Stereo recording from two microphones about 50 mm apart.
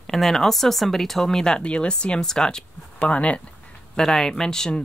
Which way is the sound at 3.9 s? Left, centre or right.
Centre.